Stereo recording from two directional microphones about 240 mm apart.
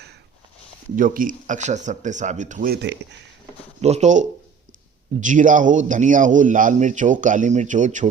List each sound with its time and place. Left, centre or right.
0.9 s speech: right
3.8 s speech: right